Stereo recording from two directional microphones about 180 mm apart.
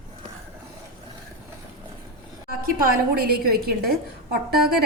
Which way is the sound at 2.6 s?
55° right (ahead or behind).